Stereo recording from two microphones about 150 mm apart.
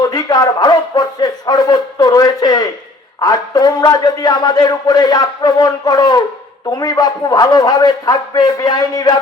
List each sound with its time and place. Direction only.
0.0 s a man's voice: 25° left (ahead or behind)